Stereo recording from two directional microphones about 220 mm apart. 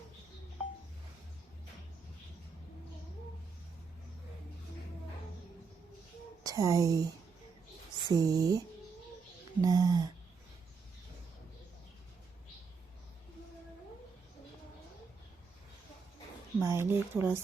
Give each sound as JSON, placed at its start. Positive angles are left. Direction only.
{"t": 6.4, "sound": "speech", "side_deg": -15}
{"t": 8.1, "sound": "speech", "side_deg": -15}
{"t": 16.6, "sound": "speech", "side_deg": -10}